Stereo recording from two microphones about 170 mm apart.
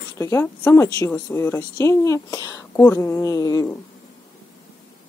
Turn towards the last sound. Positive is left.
turn(degrees=20)  # may be behind; listen again after turning